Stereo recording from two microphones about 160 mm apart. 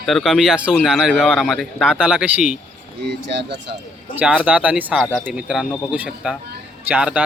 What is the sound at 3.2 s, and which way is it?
Speech, 90° right.